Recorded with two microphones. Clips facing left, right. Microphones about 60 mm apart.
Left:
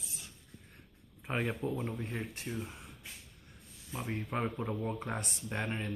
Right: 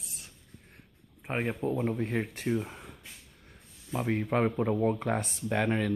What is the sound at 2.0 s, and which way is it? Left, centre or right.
Speech, right.